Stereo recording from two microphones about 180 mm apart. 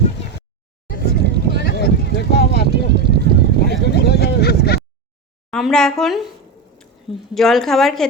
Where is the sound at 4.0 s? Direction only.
65° left (ahead or behind).